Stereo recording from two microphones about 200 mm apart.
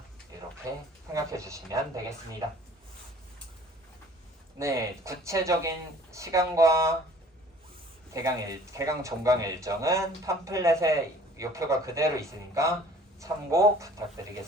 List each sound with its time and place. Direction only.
0.7 s speech: 15° right (ahead or behind)
4.6 s speech: 15° right (ahead or behind)
8.1 s speech: 15° right (ahead or behind)